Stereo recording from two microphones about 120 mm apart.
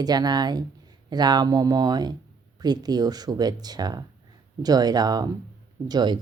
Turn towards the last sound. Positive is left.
turn(degrees=-35)  # may be behind; listen again after turning